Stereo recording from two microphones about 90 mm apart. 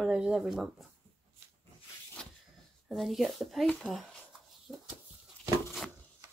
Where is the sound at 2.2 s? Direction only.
10° left (ahead or behind).